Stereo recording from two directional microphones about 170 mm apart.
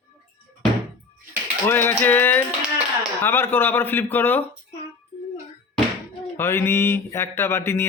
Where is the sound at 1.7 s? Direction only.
10° left (ahead or behind).